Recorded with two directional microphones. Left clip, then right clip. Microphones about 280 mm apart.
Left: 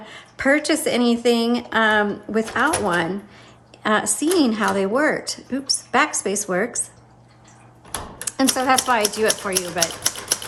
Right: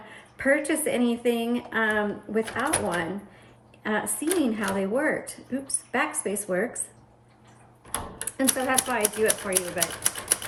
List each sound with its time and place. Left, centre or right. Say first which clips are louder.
0.3 s speech: left 5 dB; centre
8.4 s speech: left 7 dB; centre